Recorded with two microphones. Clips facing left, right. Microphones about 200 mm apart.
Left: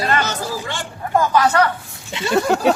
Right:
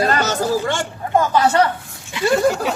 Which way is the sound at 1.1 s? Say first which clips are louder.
Even; 25° right (ahead or behind).